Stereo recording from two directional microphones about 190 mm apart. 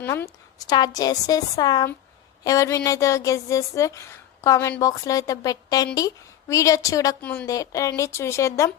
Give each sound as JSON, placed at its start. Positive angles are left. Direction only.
{"t": 0.0, "sound": "a woman's voice", "side_deg": 15}